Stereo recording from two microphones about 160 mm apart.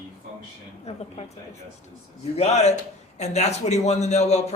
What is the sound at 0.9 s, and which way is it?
Speech, 45° left (ahead or behind).